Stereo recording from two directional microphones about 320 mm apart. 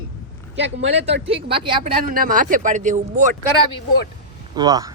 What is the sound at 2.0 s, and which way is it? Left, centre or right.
Speech, right.